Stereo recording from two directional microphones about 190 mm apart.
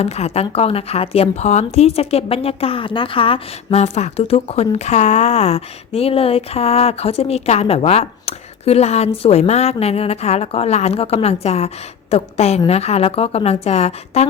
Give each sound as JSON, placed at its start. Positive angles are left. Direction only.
{"t": 0.0, "sound": "a woman's voice", "side_deg": 35}